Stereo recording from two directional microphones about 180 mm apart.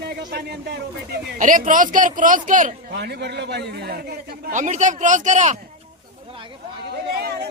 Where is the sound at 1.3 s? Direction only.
45° right (ahead or behind).